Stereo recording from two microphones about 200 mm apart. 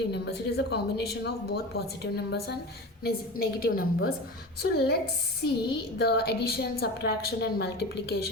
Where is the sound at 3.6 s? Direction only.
45° left (ahead or behind).